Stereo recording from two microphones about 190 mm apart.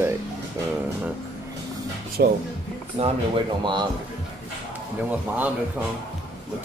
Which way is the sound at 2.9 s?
30° right (ahead or behind).